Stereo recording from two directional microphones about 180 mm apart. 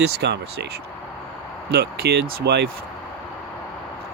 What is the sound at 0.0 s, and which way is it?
Speech, 70° right (ahead or behind).